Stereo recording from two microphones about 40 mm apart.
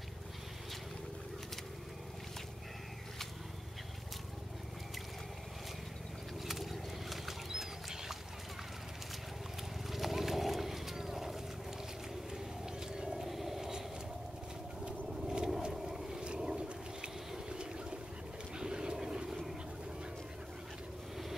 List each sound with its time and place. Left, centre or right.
6.4 s rodents: centre
9.8 s wild animals: centre
12.8 s vehicle: centre
15.1 s vehicle: centre
16.3 s a sound: right
17.5 s boat: right
18.6 s vehicle: centre